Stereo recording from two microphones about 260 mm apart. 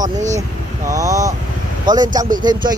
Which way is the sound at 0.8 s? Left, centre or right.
Centre.